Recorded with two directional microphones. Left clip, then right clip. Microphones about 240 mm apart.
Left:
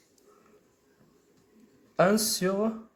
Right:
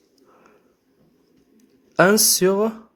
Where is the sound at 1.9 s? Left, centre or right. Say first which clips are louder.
Right 8 dB; right.